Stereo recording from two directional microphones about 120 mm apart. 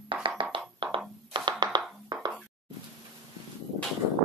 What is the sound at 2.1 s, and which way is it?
Chopping, 35° right (ahead or behind).